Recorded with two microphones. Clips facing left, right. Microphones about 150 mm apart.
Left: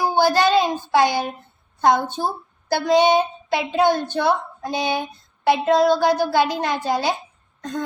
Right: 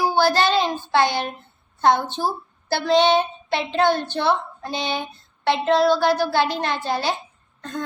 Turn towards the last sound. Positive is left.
turn(degrees=15)  # may be behind; listen again after turning